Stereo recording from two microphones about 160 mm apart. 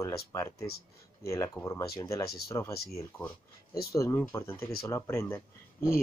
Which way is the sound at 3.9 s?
20° left (ahead or behind).